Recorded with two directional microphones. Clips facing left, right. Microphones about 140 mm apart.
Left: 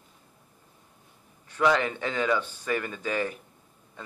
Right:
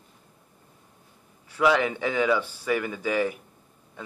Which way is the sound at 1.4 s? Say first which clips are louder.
Right 2 dB; 10° right (ahead or behind).